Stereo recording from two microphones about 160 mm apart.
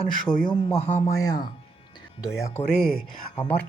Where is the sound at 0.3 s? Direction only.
5° left (ahead or behind).